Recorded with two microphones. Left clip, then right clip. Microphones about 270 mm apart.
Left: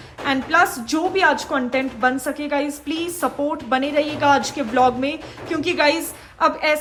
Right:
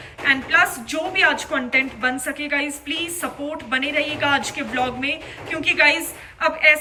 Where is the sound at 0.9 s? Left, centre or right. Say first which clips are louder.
Left 1 dB; centre.